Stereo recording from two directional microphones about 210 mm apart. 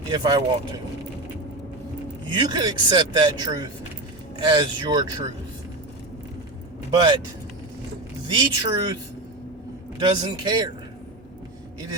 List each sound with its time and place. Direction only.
0.1 s speech: 20° right (ahead or behind)
2.3 s speech: 20° right (ahead or behind)
6.9 s speech: 20° right (ahead or behind)
8.3 s speech: 20° right (ahead or behind)
10.0 s speech: 25° right (ahead or behind)